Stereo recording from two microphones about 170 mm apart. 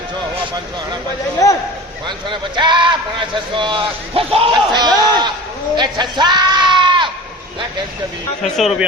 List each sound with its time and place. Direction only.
1.4 s a man's voice: 20° left (ahead or behind)
2.0 s a man's voice: 25° right (ahead or behind)
5.7 s sheep: 25° right (ahead or behind)
8.4 s speech: centre (ahead or behind)